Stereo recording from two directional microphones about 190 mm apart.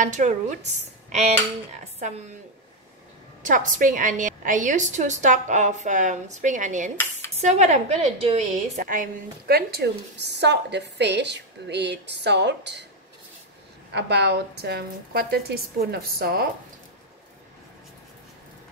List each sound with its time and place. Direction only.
0.0 s a woman's voice: 40° right (ahead or behind)
3.4 s a woman's voice: 45° right (ahead or behind); by 12.8 s 65° right (ahead or behind)
13.9 s a woman's voice: 65° right (ahead or behind)